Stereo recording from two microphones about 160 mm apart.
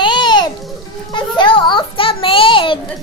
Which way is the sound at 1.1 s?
30° left (ahead or behind).